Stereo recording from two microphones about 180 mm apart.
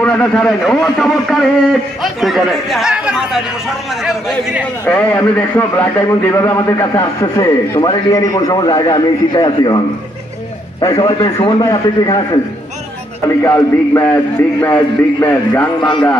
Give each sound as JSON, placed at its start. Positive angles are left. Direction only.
{"t": 0.0, "sound": "a man's voice", "side_deg": 5}
{"t": 4.8, "sound": "a man's voice", "side_deg": 10}
{"t": 10.8, "sound": "a man's voice", "side_deg": 25}
{"t": 13.4, "sound": "a man's voice", "side_deg": 15}